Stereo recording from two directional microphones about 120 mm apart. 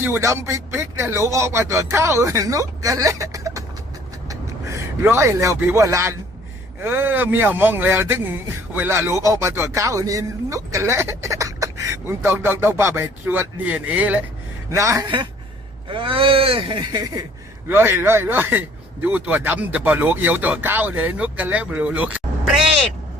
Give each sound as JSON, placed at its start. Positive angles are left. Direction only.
{"t": 0.0, "sound": "speech", "side_deg": -20}
{"t": 4.3, "sound": "a sound", "side_deg": -25}
{"t": 5.5, "sound": "speech", "side_deg": -15}
{"t": 14.7, "sound": "speech", "side_deg": -25}
{"t": 15.0, "sound": "speech", "side_deg": -40}
{"t": 17.7, "sound": "speech", "side_deg": -20}